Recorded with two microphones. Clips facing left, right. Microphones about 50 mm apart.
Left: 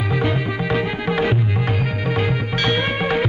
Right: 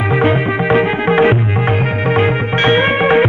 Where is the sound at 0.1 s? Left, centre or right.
Right.